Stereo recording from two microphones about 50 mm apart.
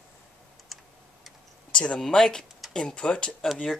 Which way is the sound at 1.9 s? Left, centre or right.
Centre.